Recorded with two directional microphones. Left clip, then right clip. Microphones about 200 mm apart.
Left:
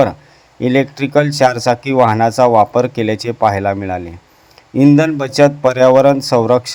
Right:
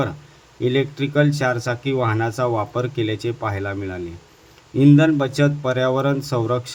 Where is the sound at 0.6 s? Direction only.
40° left (ahead or behind).